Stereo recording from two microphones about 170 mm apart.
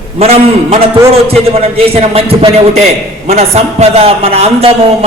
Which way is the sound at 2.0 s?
35° right (ahead or behind).